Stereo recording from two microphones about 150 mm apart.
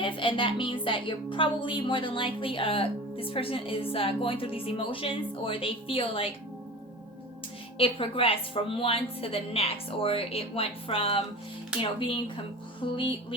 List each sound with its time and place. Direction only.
0.0 s a woman's voice: 35° left (ahead or behind)
7.8 s a woman's voice: 35° left (ahead or behind)